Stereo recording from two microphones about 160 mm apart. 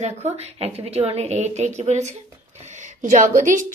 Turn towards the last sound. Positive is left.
turn(degrees=-55)  # may be behind; listen again after turning